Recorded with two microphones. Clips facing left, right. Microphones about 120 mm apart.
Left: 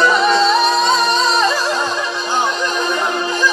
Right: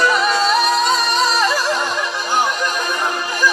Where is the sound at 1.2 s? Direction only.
25° left (ahead or behind).